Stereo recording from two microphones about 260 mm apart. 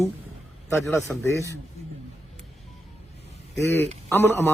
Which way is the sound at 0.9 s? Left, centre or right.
Centre.